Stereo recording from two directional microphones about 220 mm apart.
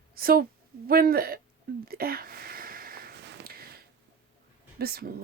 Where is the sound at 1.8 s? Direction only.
45° right (ahead or behind).